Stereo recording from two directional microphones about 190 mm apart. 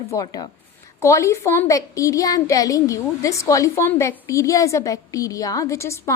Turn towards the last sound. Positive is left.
turn(degrees=15)  # may be behind; listen again after turning